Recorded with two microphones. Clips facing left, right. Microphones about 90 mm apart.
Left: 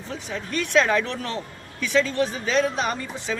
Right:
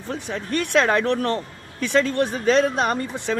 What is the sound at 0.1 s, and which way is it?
Speech, 50° right (ahead or behind).